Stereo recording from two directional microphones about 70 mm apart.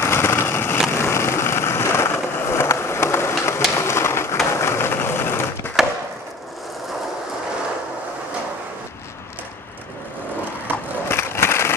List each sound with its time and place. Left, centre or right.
0.0 s vehicle: left
3.7 s bird: left
4.6 s vehicle: left
5.8 s wood: centre
11.1 s crushing: left